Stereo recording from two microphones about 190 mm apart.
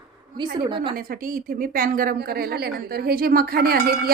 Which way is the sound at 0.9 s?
50° right (ahead or behind).